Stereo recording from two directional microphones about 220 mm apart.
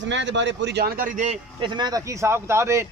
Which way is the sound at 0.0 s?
55° right (ahead or behind).